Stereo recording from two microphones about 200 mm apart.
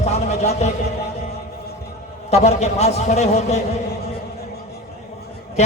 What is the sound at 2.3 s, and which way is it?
A man's voice, 35° left (ahead or behind).